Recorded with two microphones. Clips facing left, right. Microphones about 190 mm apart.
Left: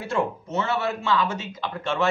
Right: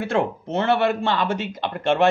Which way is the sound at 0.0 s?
65° right (ahead or behind).